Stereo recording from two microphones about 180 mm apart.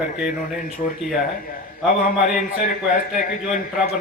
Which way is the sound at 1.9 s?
45° left (ahead or behind).